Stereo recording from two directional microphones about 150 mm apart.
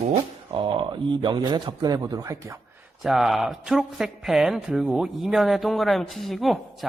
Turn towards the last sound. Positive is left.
turn(degrees=0)  # may be behind; listen again after turning